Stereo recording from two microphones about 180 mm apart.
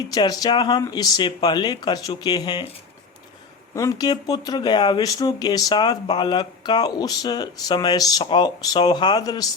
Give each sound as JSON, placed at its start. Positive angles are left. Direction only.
{"t": 0.1, "sound": "speech", "side_deg": 20}
{"t": 3.8, "sound": "speech", "side_deg": 20}